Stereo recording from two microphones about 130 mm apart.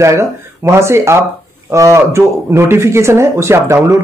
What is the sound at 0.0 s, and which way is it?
Speech, 20° right (ahead or behind).